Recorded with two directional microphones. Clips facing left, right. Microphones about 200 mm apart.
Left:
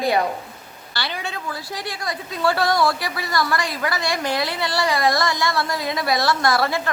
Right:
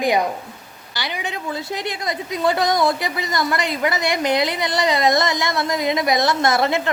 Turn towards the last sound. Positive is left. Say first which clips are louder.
# right 2 dB
turn(degrees=-20)  # may be behind; listen again after turning